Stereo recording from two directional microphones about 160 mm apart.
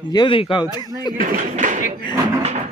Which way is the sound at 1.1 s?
55° right (ahead or behind).